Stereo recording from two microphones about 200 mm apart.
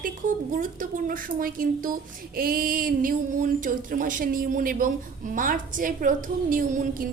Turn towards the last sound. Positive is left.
turn(degrees=-45)  # may be behind; listen again after turning